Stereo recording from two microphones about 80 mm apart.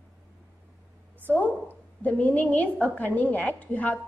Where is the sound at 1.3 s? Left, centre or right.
Left.